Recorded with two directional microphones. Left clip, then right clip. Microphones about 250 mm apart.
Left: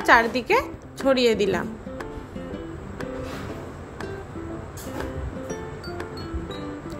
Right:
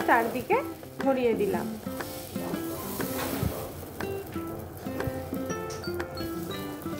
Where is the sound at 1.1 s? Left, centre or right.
Centre.